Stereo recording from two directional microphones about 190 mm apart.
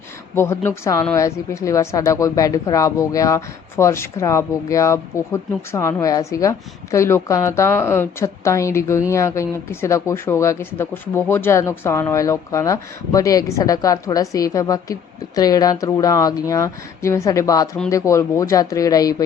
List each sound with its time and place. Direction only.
0.3 s speech: 15° left (ahead or behind)